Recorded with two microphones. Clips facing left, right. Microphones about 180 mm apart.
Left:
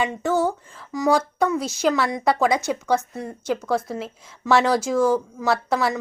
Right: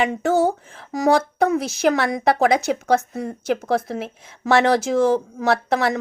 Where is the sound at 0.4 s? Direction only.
65° right (ahead or behind).